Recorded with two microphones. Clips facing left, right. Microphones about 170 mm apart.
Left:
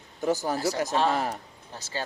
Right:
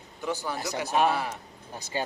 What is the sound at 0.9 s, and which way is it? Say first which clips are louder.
Speech: right 3 dB; 15° right (ahead or behind).